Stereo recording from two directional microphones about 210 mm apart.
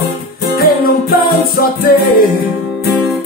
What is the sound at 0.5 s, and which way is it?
Music, 45° left (ahead or behind).